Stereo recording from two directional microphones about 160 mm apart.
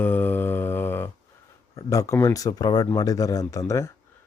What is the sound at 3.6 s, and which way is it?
Mantra, 15° left (ahead or behind).